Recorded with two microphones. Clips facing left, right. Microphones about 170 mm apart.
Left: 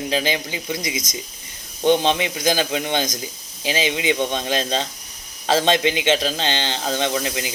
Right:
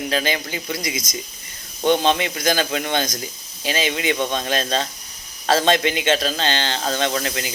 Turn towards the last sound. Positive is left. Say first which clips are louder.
# even
turn(degrees=15)  # may be behind; listen again after turning